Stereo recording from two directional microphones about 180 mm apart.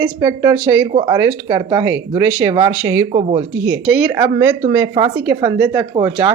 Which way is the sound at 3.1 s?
35° right (ahead or behind).